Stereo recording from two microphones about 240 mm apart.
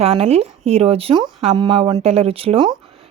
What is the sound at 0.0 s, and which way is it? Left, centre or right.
Speech, right.